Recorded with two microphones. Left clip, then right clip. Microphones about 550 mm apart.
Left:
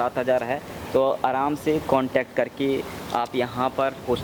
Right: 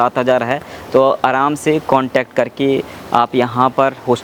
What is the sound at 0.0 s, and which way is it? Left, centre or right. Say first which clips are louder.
Speech: right 9 dB; right.